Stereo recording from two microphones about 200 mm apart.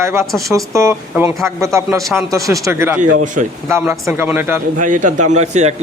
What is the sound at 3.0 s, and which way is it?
Speech, 40° right (ahead or behind).